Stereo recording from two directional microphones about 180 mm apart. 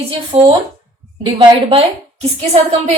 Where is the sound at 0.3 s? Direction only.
35° right (ahead or behind).